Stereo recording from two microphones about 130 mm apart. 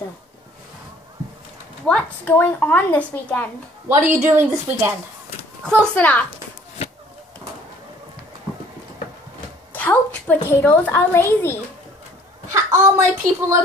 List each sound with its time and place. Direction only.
1.9 s a woman's voice: 15° left (ahead or behind)
3.9 s a woman's voice: 20° right (ahead or behind)
5.6 s a woman's voice: 10° left (ahead or behind)
9.7 s a child's voice: 15° left (ahead or behind)
12.5 s a woman's voice: 20° right (ahead or behind)